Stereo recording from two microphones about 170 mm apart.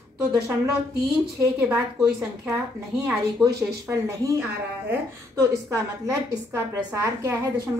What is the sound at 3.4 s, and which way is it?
Speech, 20° right (ahead or behind).